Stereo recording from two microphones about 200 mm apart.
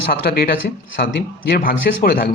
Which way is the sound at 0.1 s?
50° left (ahead or behind).